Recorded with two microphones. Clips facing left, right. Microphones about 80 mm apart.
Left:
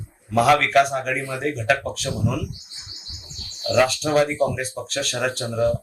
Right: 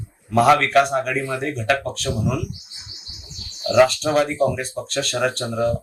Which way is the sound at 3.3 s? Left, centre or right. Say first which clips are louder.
Right 4 dB; right.